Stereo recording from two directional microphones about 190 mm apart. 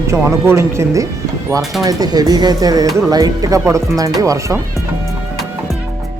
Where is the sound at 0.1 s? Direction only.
15° right (ahead or behind).